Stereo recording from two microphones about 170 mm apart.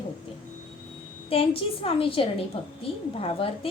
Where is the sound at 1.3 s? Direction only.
35° left (ahead or behind).